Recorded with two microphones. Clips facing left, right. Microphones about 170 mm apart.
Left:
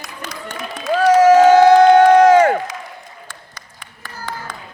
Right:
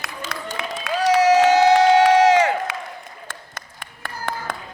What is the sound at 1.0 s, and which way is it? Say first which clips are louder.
Crowd: left 5 dB; 50° left (ahead or behind).